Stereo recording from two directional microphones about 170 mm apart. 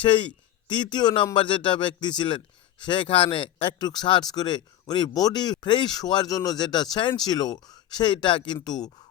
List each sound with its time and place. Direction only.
0.0 s speech: 30° left (ahead or behind)